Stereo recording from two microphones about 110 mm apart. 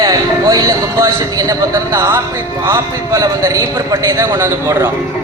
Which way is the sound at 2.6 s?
25° right (ahead or behind).